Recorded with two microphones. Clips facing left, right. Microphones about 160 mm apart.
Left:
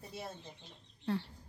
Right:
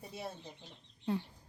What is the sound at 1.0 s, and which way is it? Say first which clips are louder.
Speech: even; 15° right (ahead or behind).